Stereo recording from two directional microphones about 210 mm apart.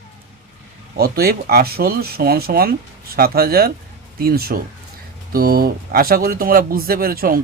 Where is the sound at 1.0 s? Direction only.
45° right (ahead or behind).